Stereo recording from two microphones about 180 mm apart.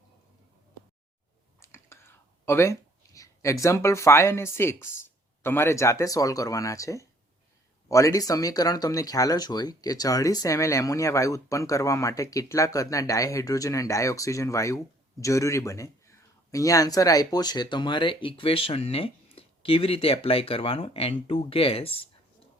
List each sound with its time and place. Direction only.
1.5 s whispering: 15° left (ahead or behind)
3.2 s speech: 15° left (ahead or behind)